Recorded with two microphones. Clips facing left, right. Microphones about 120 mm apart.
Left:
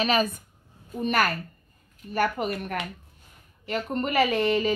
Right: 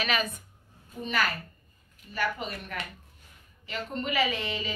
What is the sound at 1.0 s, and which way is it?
A woman's voice, 50° left (ahead or behind).